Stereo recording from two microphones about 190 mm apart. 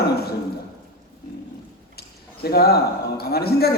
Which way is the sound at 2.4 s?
55° left (ahead or behind).